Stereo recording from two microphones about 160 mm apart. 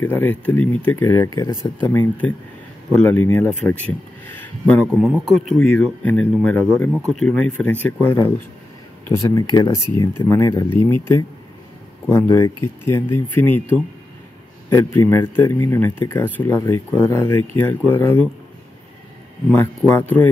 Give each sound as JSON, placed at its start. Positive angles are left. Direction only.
{"t": 0.0, "sound": "speech", "side_deg": 10}
{"t": 19.9, "sound": "speech", "side_deg": 15}